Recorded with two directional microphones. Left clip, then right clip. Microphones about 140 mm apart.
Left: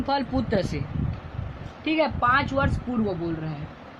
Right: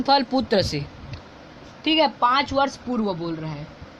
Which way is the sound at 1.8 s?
90° right.